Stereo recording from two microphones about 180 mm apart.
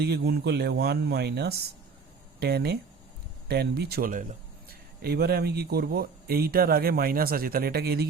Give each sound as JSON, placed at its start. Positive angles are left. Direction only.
{"t": 0.0, "sound": "speech", "side_deg": -65}
{"t": 4.7, "sound": "speech", "side_deg": -60}